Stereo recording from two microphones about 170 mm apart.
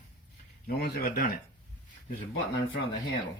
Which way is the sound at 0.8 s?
60° left (ahead or behind).